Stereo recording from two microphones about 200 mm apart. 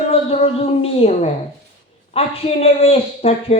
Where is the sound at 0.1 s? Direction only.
30° left (ahead or behind).